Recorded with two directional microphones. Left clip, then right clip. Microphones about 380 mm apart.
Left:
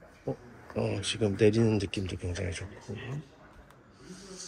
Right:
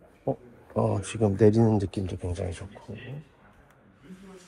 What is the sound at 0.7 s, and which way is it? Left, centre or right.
Speech, right.